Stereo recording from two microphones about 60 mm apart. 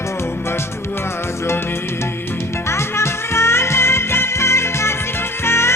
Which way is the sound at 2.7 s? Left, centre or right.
Left.